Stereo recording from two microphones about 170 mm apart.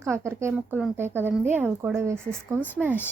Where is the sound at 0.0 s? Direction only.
15° right (ahead or behind).